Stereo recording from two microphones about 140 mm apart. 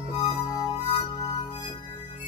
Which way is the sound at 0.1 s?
30° left (ahead or behind).